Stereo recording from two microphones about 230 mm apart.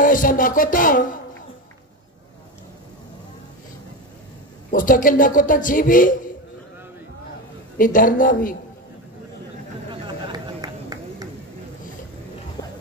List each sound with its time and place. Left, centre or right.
0.0 s a man's voice: left
4.6 s a man's voice: left
7.7 s a man's voice: left
10.0 s a sound: centre